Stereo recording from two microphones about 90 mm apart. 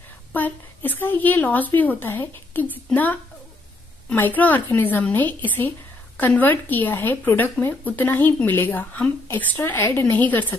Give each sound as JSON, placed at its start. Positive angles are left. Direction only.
{"t": 0.3, "sound": "a woman's voice", "side_deg": 20}